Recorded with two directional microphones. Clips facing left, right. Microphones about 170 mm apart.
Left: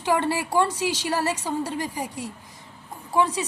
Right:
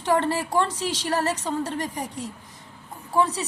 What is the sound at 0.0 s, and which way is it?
A woman's voice, 10° left (ahead or behind).